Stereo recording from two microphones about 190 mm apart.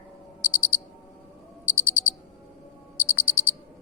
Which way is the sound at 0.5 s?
90° left.